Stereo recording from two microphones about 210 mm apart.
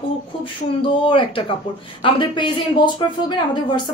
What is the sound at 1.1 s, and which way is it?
A woman's voice, 25° left (ahead or behind).